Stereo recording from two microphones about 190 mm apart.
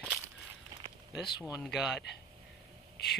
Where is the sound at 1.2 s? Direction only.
25° left (ahead or behind).